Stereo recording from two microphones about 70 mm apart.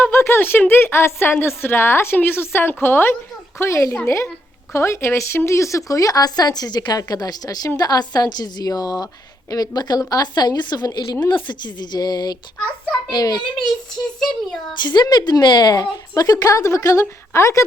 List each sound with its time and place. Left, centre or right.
0.0 s a sound: left
0.7 s a woman's voice: left
3.6 s a woman's voice: left
11.4 s a woman's voice: left
12.9 s a child's voice: left
14.2 s speech: centre
14.8 s a woman's voice: left